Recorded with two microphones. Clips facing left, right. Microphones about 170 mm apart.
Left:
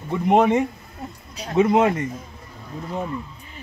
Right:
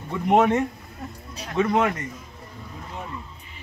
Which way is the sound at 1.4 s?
25° left (ahead or behind).